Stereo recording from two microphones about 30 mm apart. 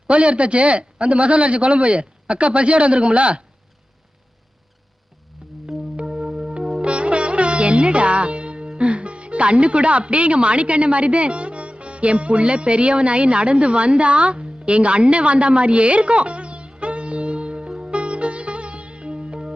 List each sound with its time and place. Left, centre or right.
0.1 s a man's voice: right
6.0 s music: right
6.8 s sitar: right
8.8 s speech: right
17.7 s music: right